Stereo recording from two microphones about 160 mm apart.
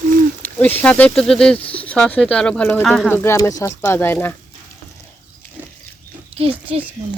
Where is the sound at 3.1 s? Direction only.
15° left (ahead or behind).